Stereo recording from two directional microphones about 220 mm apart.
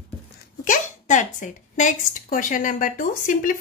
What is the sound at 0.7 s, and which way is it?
Speech, 35° left (ahead or behind).